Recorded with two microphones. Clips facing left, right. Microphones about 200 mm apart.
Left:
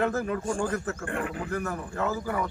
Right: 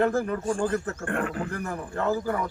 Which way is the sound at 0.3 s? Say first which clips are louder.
Right 2 dB; 5° left (ahead or behind).